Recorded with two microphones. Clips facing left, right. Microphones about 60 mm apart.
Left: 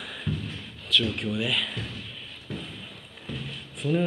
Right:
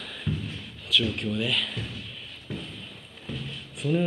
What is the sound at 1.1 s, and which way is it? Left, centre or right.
Speech, centre.